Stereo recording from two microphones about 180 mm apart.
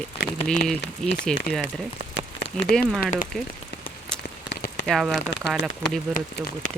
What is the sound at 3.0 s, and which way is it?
Speech, 50° left (ahead or behind).